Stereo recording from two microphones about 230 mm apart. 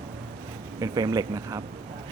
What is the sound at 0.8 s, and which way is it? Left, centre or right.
Speech, centre.